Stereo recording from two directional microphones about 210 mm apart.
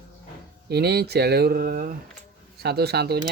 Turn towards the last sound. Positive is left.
turn(degrees=-50)  # may be behind; listen again after turning